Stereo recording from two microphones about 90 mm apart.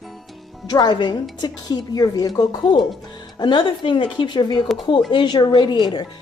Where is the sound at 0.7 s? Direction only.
50° left (ahead or behind).